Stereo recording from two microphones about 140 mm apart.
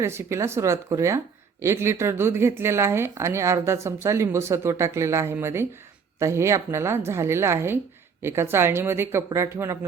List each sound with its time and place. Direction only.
0.0 s a woman's voice: 20° right (ahead or behind)